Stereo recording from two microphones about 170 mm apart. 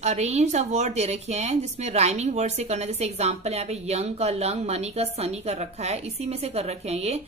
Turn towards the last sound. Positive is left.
turn(degrees=-40)  # may be behind; listen again after turning